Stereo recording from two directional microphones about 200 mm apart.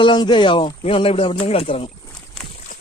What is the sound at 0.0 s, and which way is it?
Speech, 25° left (ahead or behind).